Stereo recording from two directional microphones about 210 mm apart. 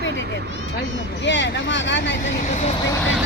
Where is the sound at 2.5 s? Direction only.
35° left (ahead or behind).